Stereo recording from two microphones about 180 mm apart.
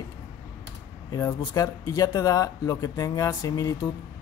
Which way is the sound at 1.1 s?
25° left (ahead or behind).